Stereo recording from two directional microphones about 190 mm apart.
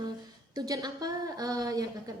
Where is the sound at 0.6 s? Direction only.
20° right (ahead or behind).